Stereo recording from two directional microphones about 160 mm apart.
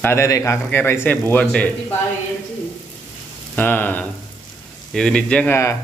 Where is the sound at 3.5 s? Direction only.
10° left (ahead or behind).